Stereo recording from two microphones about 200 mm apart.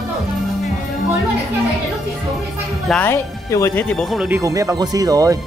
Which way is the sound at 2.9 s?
10° left (ahead or behind).